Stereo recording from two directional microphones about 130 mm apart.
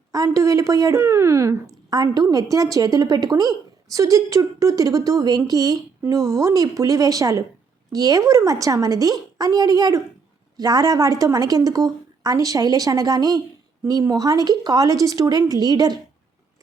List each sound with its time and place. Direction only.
0.1 s a woman's voice: 25° right (ahead or behind)